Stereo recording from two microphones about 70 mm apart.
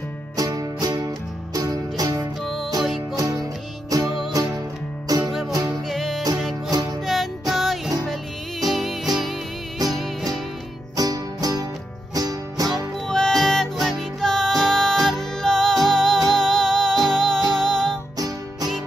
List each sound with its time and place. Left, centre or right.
0.4 s music: right
2.4 s music: centre
3.9 s music: right
5.9 s music: centre
6.7 s music: right
7.1 s music: centre
11.0 s music: right
13.1 s music: centre